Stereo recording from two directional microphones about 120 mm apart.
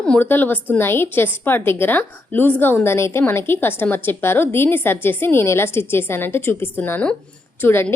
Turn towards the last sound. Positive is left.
turn(degrees=20)  # may be behind; listen again after turning